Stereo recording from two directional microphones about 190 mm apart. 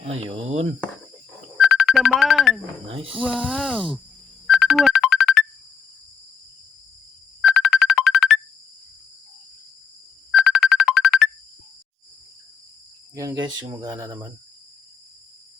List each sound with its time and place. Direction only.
0.1 s speech: 35° right (ahead or behind)
1.5 s music: centre (ahead or behind)
2.8 s speech: 30° right (ahead or behind)
3.4 s speech: 5° right (ahead or behind)
4.4 s ringtone: centre (ahead or behind)
7.4 s ringtone: centre (ahead or behind)
10.3 s ringtone: centre (ahead or behind)
13.1 s speech: 20° right (ahead or behind)